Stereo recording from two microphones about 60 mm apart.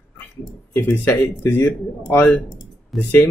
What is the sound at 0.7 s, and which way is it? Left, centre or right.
Speech, left.